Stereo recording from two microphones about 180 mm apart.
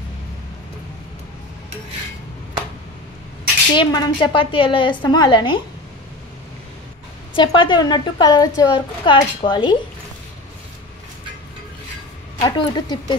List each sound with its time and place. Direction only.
3.7 s a woman's voice: 25° left (ahead or behind)
7.3 s a woman's voice: 25° left (ahead or behind)
12.4 s a woman's voice: 25° left (ahead or behind)